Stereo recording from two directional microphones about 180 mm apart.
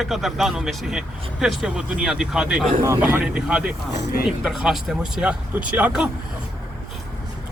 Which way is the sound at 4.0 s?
60° left (ahead or behind).